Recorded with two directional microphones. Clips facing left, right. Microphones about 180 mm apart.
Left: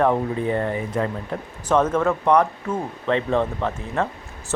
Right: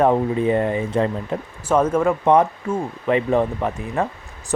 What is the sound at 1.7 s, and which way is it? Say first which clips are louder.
Speech: right 2 dB; 10° right (ahead or behind).